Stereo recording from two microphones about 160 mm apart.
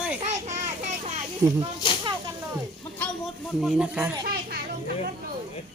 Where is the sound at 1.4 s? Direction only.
15° right (ahead or behind).